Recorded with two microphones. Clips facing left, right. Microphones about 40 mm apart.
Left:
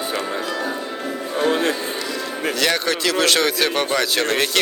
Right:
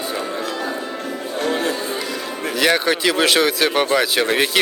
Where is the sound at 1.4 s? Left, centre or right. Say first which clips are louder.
Left 2 dB; left.